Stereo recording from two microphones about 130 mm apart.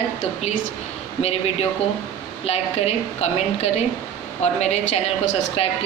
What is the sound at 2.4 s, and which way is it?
A woman's voice, 55° left (ahead or behind).